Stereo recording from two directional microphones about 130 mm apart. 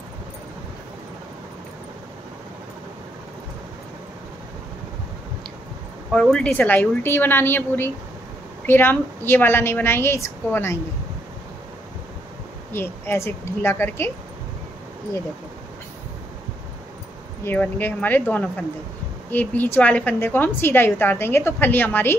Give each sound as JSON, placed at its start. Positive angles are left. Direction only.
{"t": 6.1, "sound": "a woman's voice", "side_deg": 5}
{"t": 12.7, "sound": "a woman's voice", "side_deg": 20}
{"t": 17.5, "sound": "a woman's voice", "side_deg": 15}